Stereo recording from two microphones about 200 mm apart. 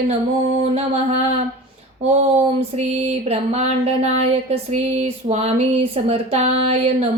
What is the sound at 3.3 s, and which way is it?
Speech, 30° right (ahead or behind).